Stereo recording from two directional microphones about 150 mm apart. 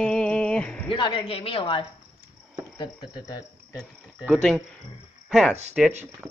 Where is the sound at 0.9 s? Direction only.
35° left (ahead or behind).